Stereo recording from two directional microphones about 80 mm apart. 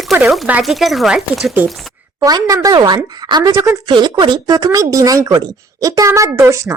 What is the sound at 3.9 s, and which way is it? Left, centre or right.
Speech, right.